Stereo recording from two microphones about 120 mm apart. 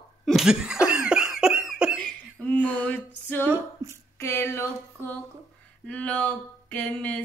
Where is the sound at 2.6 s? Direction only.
15° right (ahead or behind).